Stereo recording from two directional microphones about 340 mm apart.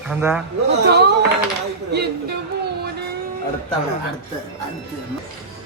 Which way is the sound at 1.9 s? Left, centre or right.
Right.